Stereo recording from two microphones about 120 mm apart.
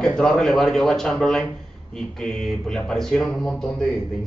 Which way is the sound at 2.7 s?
5° left (ahead or behind).